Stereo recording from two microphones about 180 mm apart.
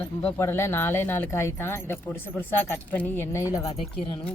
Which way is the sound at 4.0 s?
30° left (ahead or behind).